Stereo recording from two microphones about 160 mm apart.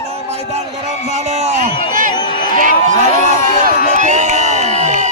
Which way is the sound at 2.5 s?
55° right (ahead or behind).